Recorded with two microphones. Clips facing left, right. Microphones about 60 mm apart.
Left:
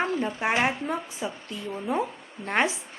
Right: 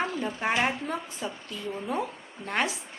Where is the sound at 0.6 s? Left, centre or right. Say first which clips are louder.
Left 2 dB; centre.